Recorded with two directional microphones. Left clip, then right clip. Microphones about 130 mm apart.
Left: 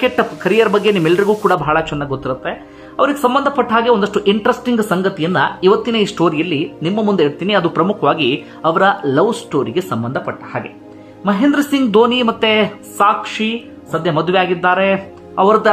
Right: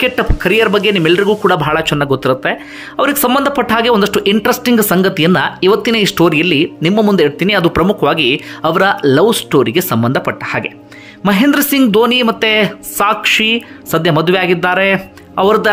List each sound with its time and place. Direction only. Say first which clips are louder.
0.0 s speech: right 2 dB; 20° right (ahead or behind)
1.4 s speech: right 2 dB; 30° right (ahead or behind)
10.0 s speech: right 7 dB; 50° right (ahead or behind)
11.9 s speech: left 1 dB; 25° right (ahead or behind)
13.2 s speech: right 9 dB; 50° right (ahead or behind)
14.1 s speech: even; 35° right (ahead or behind)